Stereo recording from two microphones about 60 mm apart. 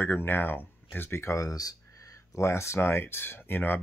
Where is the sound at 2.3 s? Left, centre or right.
Left.